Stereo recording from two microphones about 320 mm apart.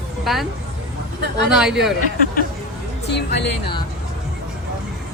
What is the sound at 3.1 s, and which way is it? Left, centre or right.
Speech, left.